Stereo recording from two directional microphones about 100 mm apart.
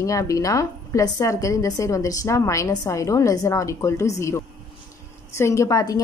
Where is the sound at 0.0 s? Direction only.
35° left (ahead or behind).